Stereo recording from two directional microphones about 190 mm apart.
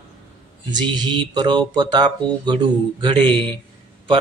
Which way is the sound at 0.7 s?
25° right (ahead or behind).